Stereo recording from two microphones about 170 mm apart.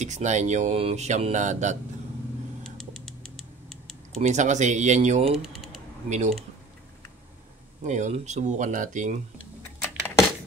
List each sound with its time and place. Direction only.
0.0 s speech: 45° right (ahead or behind)
2.8 s typing: centre (ahead or behind)
4.2 s speech: 45° right (ahead or behind)
5.4 s mechanisms: centre (ahead or behind)
6.0 s speech: 45° right (ahead or behind)
7.8 s speech: 45° right (ahead or behind)
9.6 s a sound: 10° left (ahead or behind)